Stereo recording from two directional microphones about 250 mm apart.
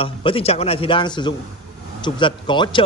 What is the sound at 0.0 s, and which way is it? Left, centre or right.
A man's voice, left.